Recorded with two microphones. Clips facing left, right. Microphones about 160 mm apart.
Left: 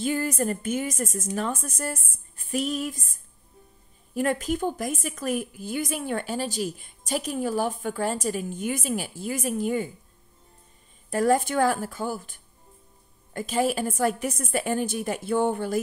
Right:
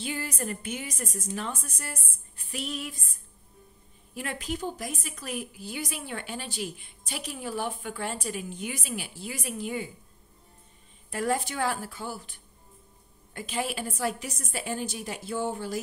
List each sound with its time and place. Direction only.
0.0 s a woman's voice: 45° left (ahead or behind)
11.1 s a woman's voice: 45° left (ahead or behind)